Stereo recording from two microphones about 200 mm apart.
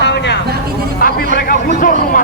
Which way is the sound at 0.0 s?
60° left (ahead or behind).